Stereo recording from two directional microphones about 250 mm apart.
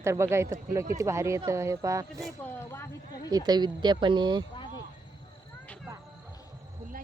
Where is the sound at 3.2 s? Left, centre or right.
Centre.